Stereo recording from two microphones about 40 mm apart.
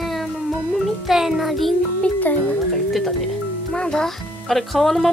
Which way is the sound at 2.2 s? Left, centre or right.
Left.